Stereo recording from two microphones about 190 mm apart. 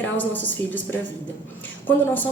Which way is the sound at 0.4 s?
10° left (ahead or behind).